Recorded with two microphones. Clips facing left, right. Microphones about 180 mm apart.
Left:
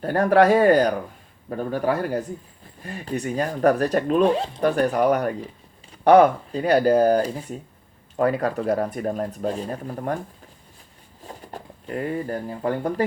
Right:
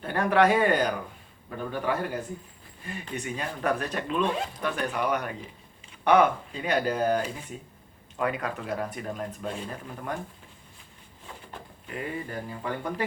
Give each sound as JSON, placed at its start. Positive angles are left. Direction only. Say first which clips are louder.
{"t": 0.0, "sound": "speech", "louder": "left 6 dB", "side_deg": 40}
{"t": 11.2, "sound": "speech", "louder": "left 6 dB", "side_deg": 40}